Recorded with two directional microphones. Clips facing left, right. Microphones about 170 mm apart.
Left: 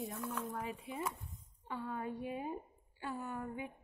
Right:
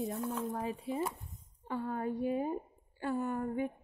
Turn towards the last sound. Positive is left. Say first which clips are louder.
# right 8 dB
turn(degrees=-45)  # may be behind; listen again after turning